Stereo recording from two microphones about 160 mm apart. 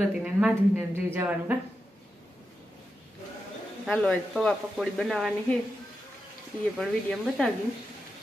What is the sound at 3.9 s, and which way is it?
Speech, 5° left (ahead or behind).